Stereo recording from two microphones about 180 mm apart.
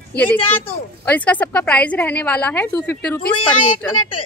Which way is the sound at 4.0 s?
30° left (ahead or behind).